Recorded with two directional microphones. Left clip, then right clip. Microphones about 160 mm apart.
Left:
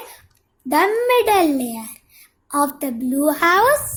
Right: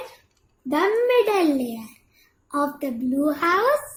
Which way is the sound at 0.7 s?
45° left (ahead or behind).